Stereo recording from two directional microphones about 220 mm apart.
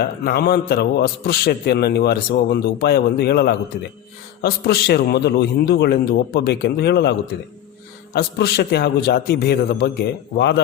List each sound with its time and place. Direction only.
0.0 s a man's voice: 45° left (ahead or behind)